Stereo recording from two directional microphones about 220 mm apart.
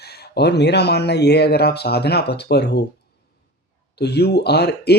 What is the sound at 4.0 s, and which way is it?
Speech, 50° left (ahead or behind).